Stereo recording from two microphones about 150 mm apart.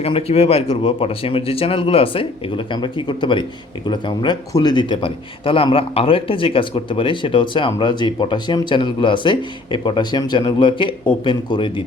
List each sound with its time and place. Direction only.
0.0 s speech: 40° left (ahead or behind)